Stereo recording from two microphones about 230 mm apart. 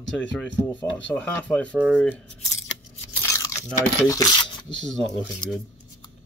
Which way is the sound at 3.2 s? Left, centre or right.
Centre.